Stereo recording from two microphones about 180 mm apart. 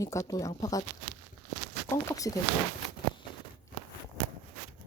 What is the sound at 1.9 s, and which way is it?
Speech, 20° left (ahead or behind).